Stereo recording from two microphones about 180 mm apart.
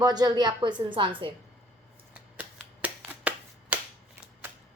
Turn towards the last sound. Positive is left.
turn(degrees=-5)  # may be behind; listen again after turning